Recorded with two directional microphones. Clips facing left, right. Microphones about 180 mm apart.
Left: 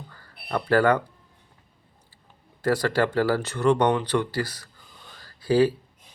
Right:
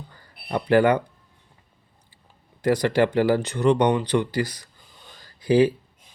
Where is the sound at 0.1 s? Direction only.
20° right (ahead or behind).